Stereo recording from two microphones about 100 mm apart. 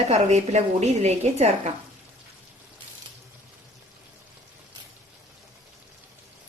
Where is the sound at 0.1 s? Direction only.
90° right.